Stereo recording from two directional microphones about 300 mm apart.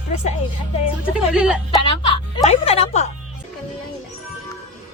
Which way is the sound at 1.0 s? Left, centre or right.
Centre.